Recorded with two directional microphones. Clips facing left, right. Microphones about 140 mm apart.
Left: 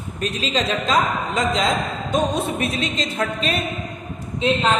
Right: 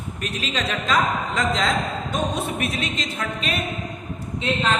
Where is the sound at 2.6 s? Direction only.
30° left (ahead or behind).